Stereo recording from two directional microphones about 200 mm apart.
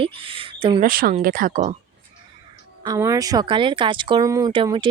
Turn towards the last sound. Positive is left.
turn(degrees=-25)  # may be behind; listen again after turning